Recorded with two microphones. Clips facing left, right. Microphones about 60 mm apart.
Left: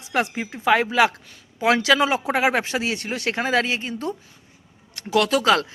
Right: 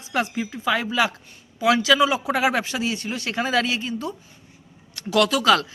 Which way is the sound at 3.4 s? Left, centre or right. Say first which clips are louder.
Even; left.